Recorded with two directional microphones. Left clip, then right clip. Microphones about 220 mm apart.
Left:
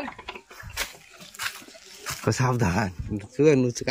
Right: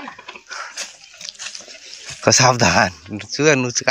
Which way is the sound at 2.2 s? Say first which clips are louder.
Right 13 dB; 30° right (ahead or behind).